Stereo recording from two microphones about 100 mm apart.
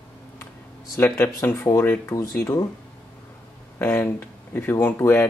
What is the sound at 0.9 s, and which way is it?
Speech, 25° left (ahead or behind).